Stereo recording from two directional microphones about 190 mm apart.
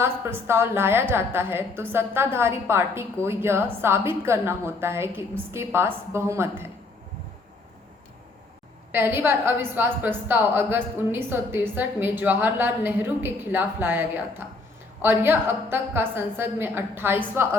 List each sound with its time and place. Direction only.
0.0 s a woman's voice: 15° right (ahead or behind)
8.9 s a woman's voice: 10° right (ahead or behind)